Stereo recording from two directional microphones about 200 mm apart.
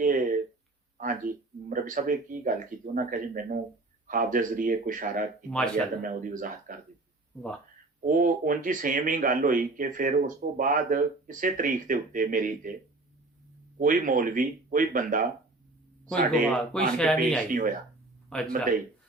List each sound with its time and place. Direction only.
0.0 s a sound: 45° right (ahead or behind)
0.9 s speech: 45° right (ahead or behind)
5.5 s speech: 5° left (ahead or behind)
6.0 s speech: 40° right (ahead or behind)
8.0 s speech: 40° right (ahead or behind)
13.7 s speech: 40° right (ahead or behind)
16.0 s speech: centre (ahead or behind)